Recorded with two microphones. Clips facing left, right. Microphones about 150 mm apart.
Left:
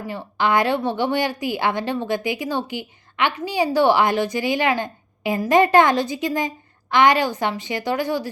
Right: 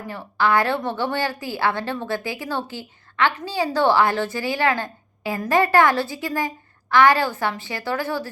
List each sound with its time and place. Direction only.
0.1 s a woman's voice: 20° left (ahead or behind)